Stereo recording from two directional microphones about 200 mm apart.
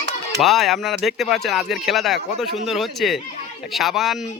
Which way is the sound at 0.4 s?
Centre (ahead or behind).